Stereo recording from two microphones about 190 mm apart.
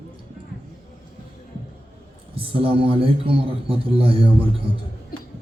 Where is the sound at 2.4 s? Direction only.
30° right (ahead or behind).